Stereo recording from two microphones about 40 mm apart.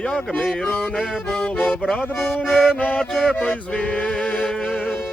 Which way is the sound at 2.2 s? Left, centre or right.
Left.